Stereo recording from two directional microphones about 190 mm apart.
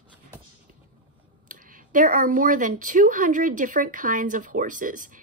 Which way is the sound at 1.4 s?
45° right (ahead or behind).